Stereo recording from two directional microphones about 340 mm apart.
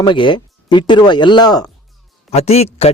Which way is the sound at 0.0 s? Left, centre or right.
Centre.